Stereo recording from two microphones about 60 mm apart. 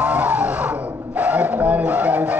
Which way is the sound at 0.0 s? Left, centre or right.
Right.